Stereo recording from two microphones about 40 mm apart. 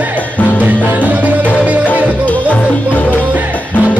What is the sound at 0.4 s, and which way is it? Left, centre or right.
Music, left.